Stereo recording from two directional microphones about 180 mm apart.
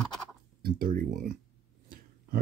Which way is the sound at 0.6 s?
50° right (ahead or behind).